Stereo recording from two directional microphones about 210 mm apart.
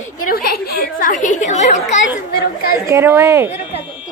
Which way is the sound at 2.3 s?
50° left (ahead or behind).